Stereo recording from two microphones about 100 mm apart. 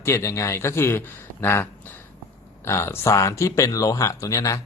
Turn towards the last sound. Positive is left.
turn(degrees=30)  # may be behind; listen again after turning